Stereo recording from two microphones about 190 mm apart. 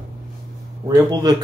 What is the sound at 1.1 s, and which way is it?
Speech, 20° right (ahead or behind).